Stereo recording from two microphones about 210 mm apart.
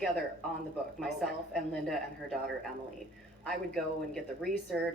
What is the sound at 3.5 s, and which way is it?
A man's voice, centre (ahead or behind).